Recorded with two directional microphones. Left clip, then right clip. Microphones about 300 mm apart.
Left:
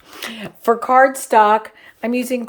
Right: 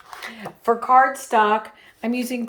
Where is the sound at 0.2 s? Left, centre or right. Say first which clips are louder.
Left 7 dB; left.